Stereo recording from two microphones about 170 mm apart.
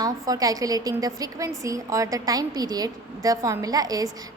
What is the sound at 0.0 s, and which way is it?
A woman's voice, 20° right (ahead or behind).